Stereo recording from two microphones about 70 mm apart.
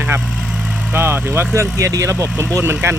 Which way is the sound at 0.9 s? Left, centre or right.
Right.